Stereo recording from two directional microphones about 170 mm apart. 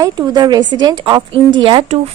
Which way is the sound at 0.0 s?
25° right (ahead or behind).